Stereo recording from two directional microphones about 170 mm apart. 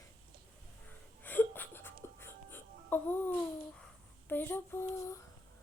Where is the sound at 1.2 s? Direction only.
10° left (ahead or behind).